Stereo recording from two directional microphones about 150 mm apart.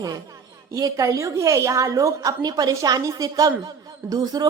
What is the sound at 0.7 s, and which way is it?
A woman's voice, 20° right (ahead or behind).